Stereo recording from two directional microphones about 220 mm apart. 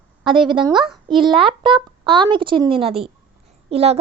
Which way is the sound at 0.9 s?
Centre (ahead or behind).